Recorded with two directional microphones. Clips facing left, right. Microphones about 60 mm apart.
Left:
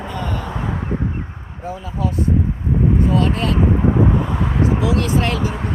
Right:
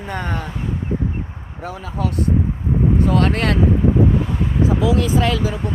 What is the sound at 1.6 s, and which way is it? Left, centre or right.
Speech, right.